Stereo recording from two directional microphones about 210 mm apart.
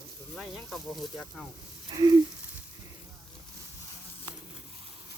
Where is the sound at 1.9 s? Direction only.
20° right (ahead or behind).